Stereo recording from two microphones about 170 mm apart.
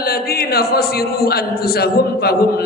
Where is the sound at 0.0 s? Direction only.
65° left (ahead or behind).